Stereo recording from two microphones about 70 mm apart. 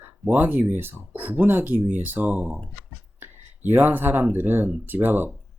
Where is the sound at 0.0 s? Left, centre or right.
Right.